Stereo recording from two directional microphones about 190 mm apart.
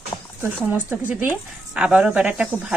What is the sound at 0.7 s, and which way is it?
Speech, 10° right (ahead or behind).